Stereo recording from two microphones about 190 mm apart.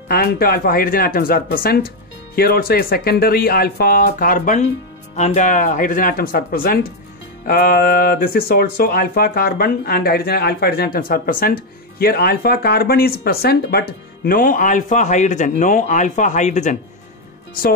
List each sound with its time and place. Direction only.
0.1 s speech: 55° left (ahead or behind)